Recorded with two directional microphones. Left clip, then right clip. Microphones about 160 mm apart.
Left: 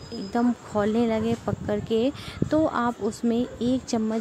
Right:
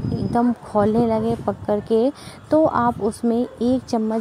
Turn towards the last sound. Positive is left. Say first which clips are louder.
# right 5 dB
turn(degrees=-15)  # may be behind; listen again after turning